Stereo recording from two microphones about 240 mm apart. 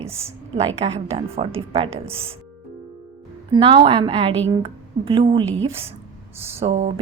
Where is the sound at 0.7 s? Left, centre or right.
Right.